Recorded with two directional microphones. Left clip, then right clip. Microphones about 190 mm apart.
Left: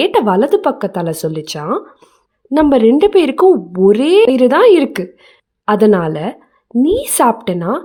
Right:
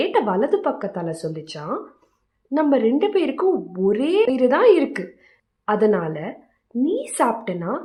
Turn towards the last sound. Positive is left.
turn(degrees=60)  # may be behind; listen again after turning